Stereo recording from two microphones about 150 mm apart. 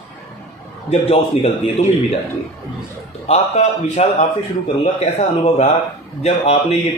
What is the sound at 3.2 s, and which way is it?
Speech, 45° left (ahead or behind).